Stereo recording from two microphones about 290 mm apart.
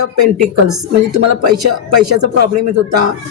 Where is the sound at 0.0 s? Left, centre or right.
Right.